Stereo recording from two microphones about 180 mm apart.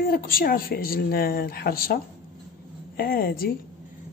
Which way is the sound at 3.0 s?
55° left (ahead or behind).